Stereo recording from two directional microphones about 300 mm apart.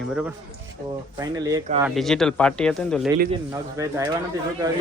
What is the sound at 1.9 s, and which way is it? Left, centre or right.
Speech, centre.